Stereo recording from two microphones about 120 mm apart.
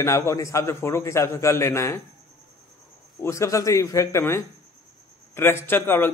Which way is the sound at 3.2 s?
25° left (ahead or behind).